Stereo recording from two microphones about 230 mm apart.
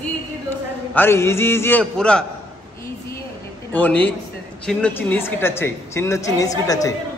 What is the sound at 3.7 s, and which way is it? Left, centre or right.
A woman's voice, centre.